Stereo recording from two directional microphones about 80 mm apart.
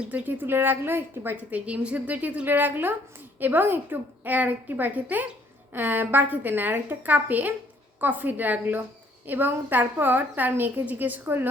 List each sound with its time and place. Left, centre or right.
0.0 s a woman's voice: right